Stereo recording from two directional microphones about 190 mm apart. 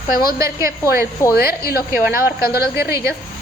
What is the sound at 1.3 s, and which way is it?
Speech, 55° left (ahead or behind).